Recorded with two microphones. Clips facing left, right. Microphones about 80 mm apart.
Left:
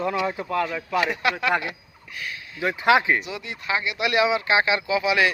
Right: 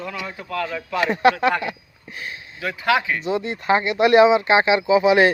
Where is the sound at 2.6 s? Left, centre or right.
Left.